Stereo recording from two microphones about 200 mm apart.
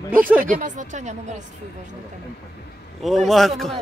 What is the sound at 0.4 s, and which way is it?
Speech, 40° right (ahead or behind).